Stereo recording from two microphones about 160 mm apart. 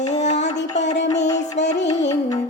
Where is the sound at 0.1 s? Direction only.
45° left (ahead or behind).